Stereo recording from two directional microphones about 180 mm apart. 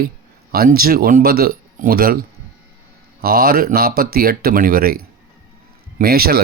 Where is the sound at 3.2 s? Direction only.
55° right (ahead or behind).